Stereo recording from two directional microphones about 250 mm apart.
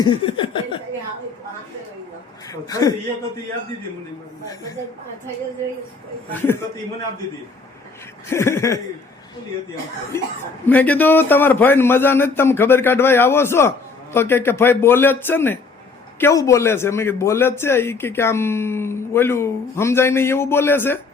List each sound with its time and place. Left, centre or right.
0.0 s a sound: centre
2.5 s a man's voice: centre
8.3 s a man's voice: centre
10.7 s a man's voice: centre